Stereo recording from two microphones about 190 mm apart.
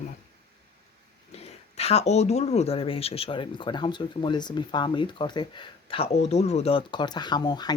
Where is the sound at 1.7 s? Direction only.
35° left (ahead or behind).